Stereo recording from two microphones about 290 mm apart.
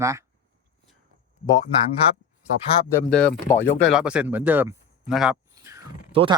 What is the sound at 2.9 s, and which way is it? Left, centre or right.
Speech, centre.